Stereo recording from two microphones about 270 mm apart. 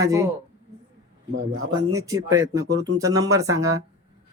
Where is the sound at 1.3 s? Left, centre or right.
Right.